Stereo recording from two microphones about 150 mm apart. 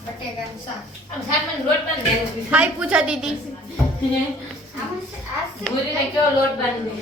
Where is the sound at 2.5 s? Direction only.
10° right (ahead or behind).